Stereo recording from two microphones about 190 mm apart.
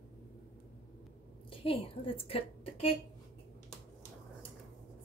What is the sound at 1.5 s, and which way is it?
A woman's voice, 30° left (ahead or behind).